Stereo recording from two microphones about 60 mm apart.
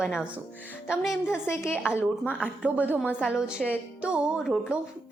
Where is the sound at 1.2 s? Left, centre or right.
Left.